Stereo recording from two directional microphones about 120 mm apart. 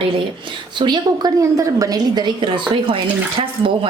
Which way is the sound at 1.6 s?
30° right (ahead or behind).